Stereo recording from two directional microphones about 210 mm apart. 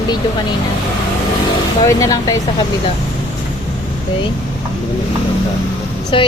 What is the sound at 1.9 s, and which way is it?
Speech, 15° left (ahead or behind).